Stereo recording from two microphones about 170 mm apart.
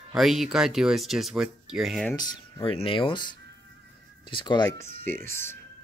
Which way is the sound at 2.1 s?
25° left (ahead or behind).